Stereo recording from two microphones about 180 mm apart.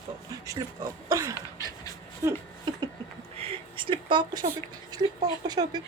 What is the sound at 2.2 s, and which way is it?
Speech, 20° right (ahead or behind).